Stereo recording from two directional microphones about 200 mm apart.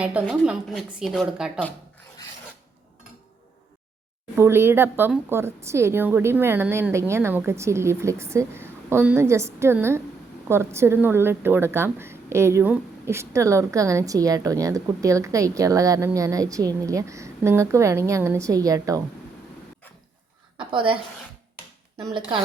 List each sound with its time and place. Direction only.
0.0 s a woman's voice: 5° right (ahead or behind)
4.4 s a woman's voice: 10° right (ahead or behind)
20.6 s a woman's voice: 25° right (ahead or behind)